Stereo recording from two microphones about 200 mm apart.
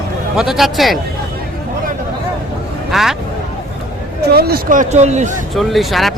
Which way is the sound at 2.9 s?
Centre (ahead or behind).